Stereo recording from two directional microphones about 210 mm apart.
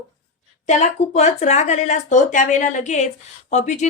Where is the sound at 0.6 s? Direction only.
35° left (ahead or behind).